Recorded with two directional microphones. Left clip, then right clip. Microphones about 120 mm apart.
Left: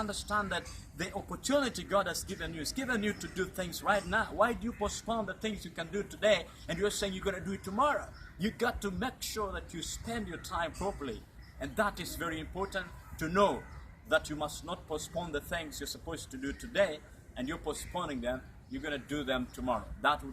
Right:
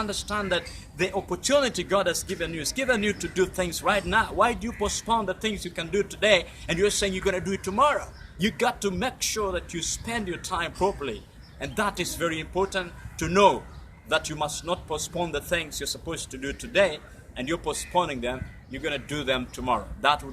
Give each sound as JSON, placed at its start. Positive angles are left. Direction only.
{"t": 0.0, "sound": "a man's voice", "side_deg": -30}